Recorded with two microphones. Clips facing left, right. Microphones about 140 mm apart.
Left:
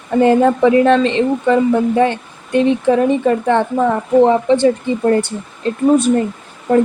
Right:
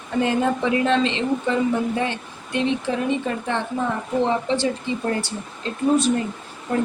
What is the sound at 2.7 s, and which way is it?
Speech, 50° left (ahead or behind).